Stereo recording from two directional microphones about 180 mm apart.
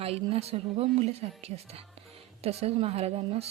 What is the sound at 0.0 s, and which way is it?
Speech, 35° right (ahead or behind).